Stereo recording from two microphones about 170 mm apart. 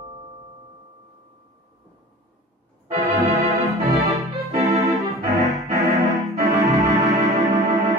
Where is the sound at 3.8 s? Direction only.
20° right (ahead or behind).